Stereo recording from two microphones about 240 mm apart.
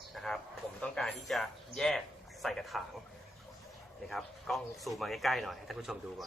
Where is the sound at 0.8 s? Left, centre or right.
Centre.